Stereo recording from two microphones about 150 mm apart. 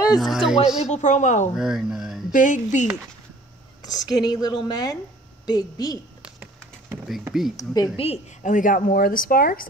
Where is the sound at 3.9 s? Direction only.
25° left (ahead or behind).